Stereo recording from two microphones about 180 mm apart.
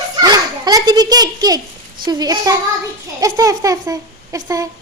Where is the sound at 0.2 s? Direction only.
20° right (ahead or behind).